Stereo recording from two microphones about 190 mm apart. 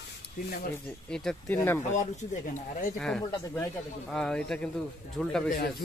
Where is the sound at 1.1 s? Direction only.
5° left (ahead or behind).